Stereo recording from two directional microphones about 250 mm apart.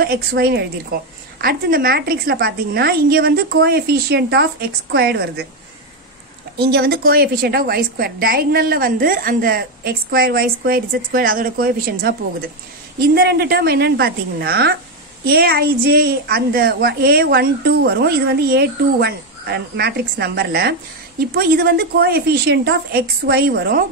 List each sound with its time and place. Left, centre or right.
0.0 s a woman's voice: right
6.6 s a woman's voice: right